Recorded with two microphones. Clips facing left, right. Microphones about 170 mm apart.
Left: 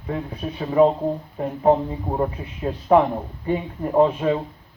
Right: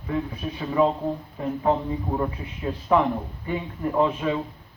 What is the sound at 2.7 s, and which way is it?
Speech, 40° left (ahead or behind).